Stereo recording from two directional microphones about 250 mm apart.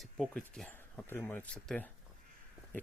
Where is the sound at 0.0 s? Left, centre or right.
Centre.